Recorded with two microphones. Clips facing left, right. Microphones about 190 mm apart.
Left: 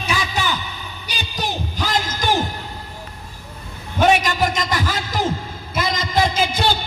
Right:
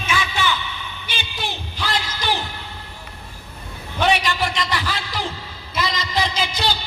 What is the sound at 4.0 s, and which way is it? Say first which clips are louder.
A man's voice: left 4 dB; 45° left (ahead or behind).